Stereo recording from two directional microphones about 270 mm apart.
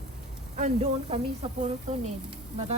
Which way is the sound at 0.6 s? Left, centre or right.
Right.